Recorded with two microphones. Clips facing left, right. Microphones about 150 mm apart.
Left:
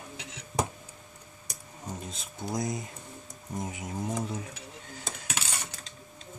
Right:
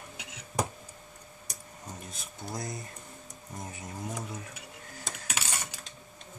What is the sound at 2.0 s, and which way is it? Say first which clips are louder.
Speech: left 5 dB; 20° left (ahead or behind).